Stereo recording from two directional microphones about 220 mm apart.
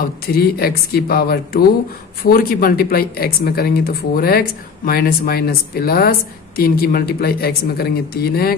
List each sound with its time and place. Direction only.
0.0 s speech: 45° left (ahead or behind)